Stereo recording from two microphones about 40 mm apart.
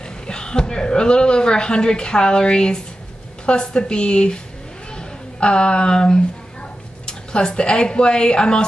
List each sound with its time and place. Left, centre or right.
0.3 s a woman's voice: left
4.9 s a sound: left
7.1 s speech: left